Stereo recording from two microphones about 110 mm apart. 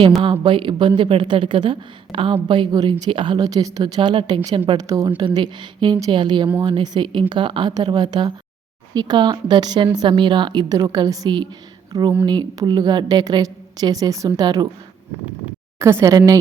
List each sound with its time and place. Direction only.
0.3 s a woman's voice: 50° right (ahead or behind)
4.8 s speech: 30° right (ahead or behind)
5.0 s a woman's voice: 50° right (ahead or behind)
15.8 s speech: 25° right (ahead or behind)